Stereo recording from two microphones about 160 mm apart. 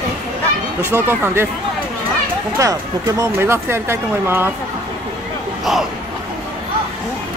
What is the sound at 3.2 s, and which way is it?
Speech, 15° right (ahead or behind).